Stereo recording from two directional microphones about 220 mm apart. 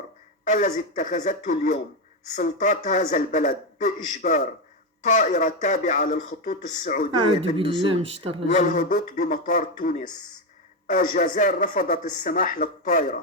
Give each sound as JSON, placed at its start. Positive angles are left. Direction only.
{"t": 0.4, "sound": "speech", "side_deg": 35}
{"t": 7.5, "sound": "speech", "side_deg": -25}
{"t": 8.5, "sound": "speech", "side_deg": 40}